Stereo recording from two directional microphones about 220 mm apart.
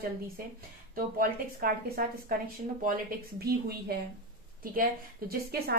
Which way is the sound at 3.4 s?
45° right (ahead or behind).